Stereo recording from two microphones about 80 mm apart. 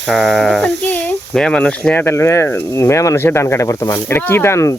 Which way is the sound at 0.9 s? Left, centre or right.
Left.